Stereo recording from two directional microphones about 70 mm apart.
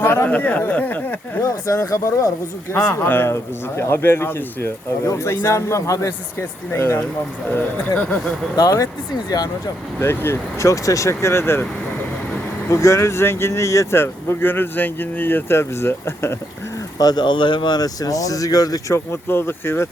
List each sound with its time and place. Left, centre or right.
0.0 s a sound: left
0.3 s speech: left
1.4 s speech: left
2.7 s speech: left
10.0 s speech: left
10.7 s speech: left
12.6 s speech: left
17.0 s speech: left
18.9 s speech: left